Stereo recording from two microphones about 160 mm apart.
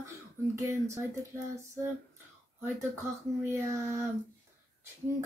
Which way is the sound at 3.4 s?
15° right (ahead or behind).